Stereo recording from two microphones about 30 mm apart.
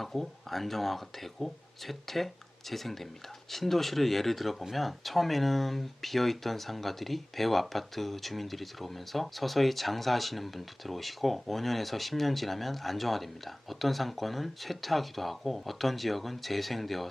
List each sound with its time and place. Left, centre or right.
0.0 s speech: centre